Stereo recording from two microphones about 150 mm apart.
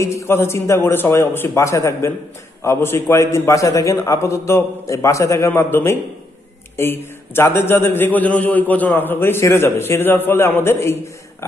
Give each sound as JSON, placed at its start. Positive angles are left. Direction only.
{"t": 0.0, "sound": "a man's voice", "side_deg": 20}